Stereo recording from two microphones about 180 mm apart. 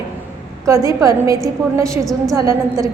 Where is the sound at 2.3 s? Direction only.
20° right (ahead or behind).